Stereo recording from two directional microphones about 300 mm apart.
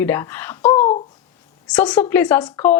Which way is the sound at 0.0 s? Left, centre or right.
Centre.